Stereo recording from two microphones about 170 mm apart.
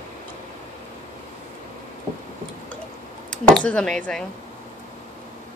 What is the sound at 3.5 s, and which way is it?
Speech, 5° left (ahead or behind).